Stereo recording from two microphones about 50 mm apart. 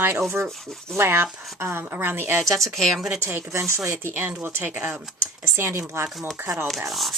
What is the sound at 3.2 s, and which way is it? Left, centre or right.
A woman's voice, right.